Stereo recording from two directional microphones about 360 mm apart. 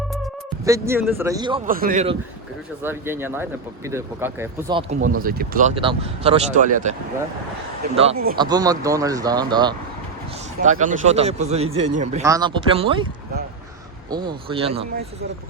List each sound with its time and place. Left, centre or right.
0.6 s a man's voice: centre
2.8 s a man's voice: centre
7.9 s a man's voice: centre
14.1 s a man's voice: centre